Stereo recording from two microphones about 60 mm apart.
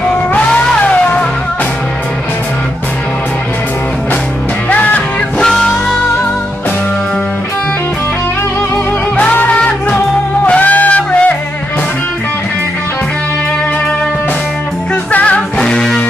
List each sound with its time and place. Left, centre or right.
0.0 s music: left
0.5 s cat: centre
4.6 s music: left
5.4 s music: centre
9.5 s music: centre
15.0 s music: left
15.6 s music: centre